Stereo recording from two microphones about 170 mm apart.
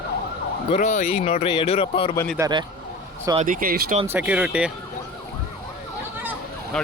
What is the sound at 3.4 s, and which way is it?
Speech, 55° right (ahead or behind).